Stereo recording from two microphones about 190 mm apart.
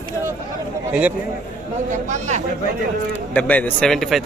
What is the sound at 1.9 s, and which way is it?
Speech, 40° right (ahead or behind).